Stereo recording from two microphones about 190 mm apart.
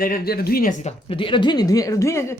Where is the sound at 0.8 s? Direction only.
30° left (ahead or behind); by 2.3 s 15° left (ahead or behind).